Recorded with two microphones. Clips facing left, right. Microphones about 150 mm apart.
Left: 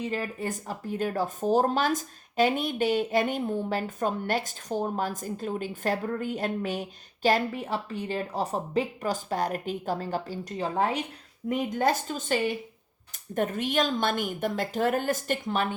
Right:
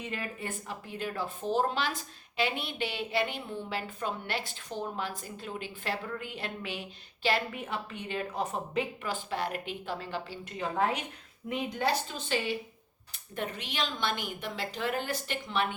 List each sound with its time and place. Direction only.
0.0 s speech: 35° left (ahead or behind)
11.4 s speech: 45° left (ahead or behind)